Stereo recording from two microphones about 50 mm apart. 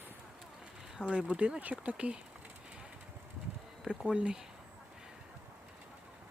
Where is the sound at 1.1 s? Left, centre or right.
Right.